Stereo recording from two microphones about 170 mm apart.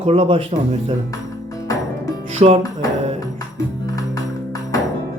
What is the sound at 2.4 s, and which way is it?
Speech, 40° right (ahead or behind).